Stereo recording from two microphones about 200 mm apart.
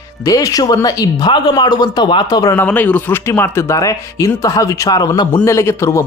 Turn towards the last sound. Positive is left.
turn(degrees=15)  # may be behind; listen again after turning